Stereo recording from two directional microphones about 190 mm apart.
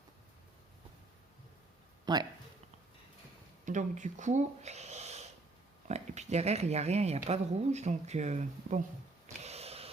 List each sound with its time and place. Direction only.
2.1 s speech: 20° right (ahead or behind)
3.7 s speech: 40° right (ahead or behind)
9.2 s a sound: 35° right (ahead or behind)